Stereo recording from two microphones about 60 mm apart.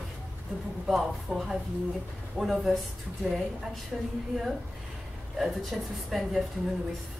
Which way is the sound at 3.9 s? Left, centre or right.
Centre.